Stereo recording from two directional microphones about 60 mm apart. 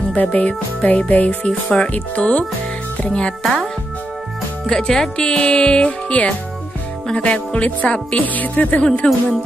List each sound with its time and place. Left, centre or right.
0.1 s speech: left
4.6 s speech: centre